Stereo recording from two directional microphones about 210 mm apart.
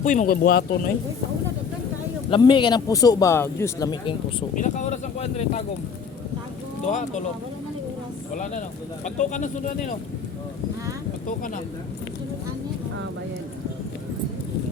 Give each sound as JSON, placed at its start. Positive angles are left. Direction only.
{"t": 0.0, "sound": "speech", "side_deg": 35}
{"t": 2.3, "sound": "a man's voice", "side_deg": 20}
{"t": 4.5, "sound": "speech", "side_deg": 35}
{"t": 6.8, "sound": "speech", "side_deg": 35}
{"t": 9.0, "sound": "speech", "side_deg": 35}
{"t": 11.3, "sound": "speech", "side_deg": 35}